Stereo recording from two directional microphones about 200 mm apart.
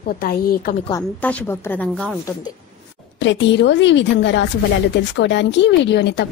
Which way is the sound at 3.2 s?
65° left (ahead or behind).